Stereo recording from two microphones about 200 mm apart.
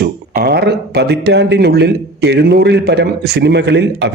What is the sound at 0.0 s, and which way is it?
Speech, 50° right (ahead or behind).